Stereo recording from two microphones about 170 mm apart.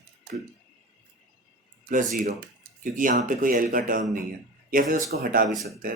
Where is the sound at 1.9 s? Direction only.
50° right (ahead or behind).